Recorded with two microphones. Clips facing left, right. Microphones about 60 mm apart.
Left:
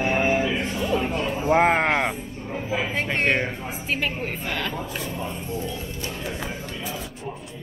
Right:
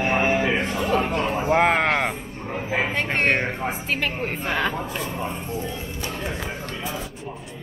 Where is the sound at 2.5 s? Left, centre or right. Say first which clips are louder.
Right 2 dB; right.